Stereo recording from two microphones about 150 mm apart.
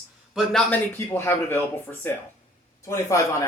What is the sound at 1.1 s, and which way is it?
Speech, 15° left (ahead or behind).